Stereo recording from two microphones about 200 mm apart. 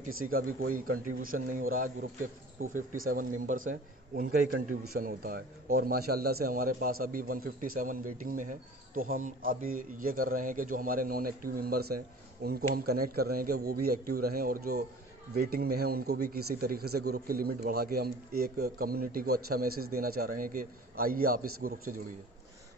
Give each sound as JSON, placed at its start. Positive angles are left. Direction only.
{"t": 0.0, "sound": "a man's voice", "side_deg": -45}